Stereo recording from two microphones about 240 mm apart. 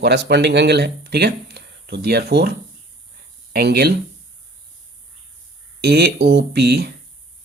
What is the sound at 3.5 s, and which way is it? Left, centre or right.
Speech, right.